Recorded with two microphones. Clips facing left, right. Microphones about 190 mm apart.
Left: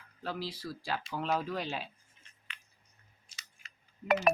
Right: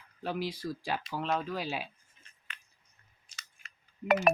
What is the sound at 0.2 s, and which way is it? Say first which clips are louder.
Speech: right 4 dB; 15° right (ahead or behind).